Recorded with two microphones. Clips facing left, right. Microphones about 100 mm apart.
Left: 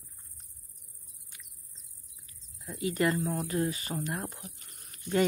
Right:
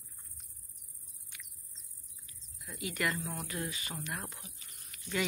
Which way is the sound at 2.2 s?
35° left (ahead or behind).